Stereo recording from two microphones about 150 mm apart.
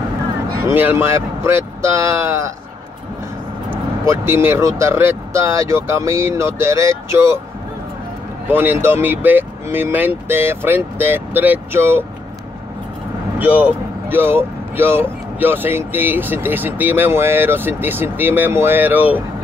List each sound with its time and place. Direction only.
0.6 s speech: 15° right (ahead or behind)
3.7 s speech: 15° right (ahead or behind)
8.5 s speech: 15° right (ahead or behind)
13.4 s speech: 10° right (ahead or behind)